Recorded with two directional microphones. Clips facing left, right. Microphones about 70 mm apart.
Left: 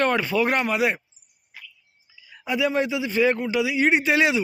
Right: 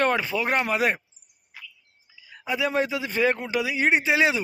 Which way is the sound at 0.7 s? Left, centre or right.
Right.